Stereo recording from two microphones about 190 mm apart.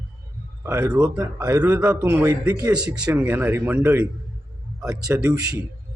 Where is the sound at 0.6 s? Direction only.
15° right (ahead or behind).